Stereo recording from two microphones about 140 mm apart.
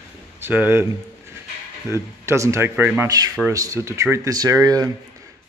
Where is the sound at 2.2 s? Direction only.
20° right (ahead or behind).